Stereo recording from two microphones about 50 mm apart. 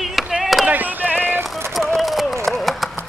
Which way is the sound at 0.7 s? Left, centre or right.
Right.